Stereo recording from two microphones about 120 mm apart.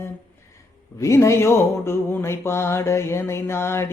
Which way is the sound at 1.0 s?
25° left (ahead or behind).